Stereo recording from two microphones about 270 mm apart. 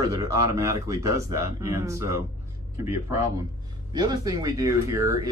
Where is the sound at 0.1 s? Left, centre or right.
Centre.